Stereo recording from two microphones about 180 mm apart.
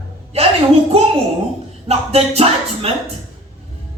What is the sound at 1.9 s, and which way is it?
Speech, 35° right (ahead or behind).